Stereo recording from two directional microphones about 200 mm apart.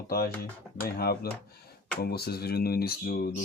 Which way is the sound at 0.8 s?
50° left (ahead or behind).